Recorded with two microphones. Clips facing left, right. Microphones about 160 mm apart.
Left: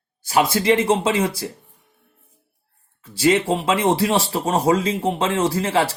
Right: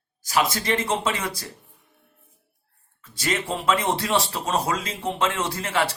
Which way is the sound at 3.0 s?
30° left (ahead or behind).